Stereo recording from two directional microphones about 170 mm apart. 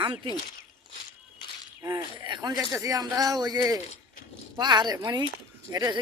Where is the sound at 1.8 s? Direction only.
25° right (ahead or behind).